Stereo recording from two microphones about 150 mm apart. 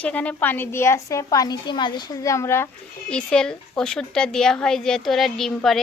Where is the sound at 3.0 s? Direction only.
5° left (ahead or behind).